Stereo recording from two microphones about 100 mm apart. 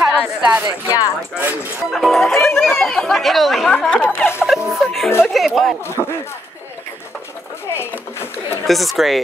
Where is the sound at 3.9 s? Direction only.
15° left (ahead or behind).